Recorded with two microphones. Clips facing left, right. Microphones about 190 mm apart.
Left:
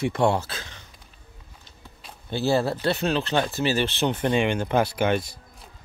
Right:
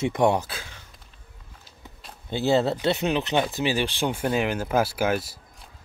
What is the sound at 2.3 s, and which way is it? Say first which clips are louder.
Speech: right 1 dB; 20° right (ahead or behind).